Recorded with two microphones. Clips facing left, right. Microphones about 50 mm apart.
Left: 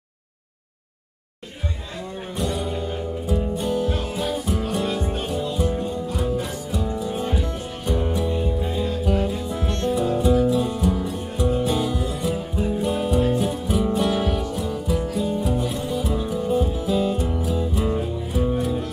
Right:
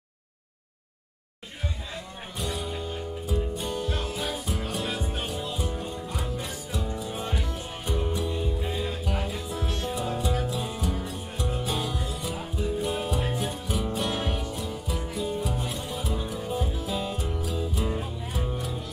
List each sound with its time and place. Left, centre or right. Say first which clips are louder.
2.3 s music: left 6 dB; centre